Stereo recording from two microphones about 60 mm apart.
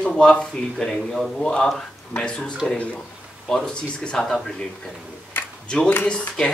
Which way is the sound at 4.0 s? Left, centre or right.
Centre.